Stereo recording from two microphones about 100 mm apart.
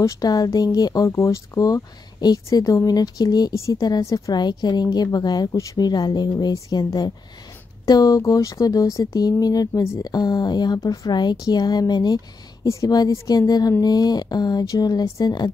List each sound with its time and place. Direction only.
0.0 s a woman's voice: 40° left (ahead or behind)